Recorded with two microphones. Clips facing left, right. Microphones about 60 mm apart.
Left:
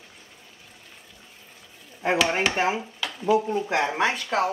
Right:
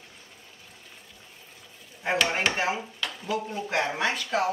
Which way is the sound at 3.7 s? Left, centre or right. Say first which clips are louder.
Left 1 dB; centre.